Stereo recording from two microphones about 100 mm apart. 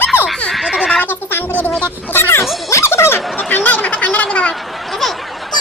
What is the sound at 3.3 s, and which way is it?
Chatter, 20° left (ahead or behind).